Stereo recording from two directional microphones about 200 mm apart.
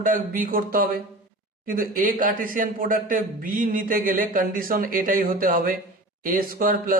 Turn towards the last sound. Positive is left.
turn(degrees=-45)  # may be behind; listen again after turning